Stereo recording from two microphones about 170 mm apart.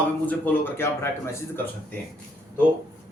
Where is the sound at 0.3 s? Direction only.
10° left (ahead or behind).